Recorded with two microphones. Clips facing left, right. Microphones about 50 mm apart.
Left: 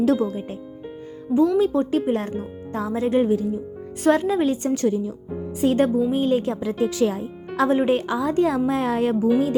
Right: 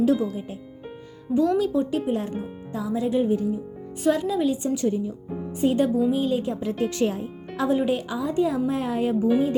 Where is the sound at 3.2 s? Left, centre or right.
Left.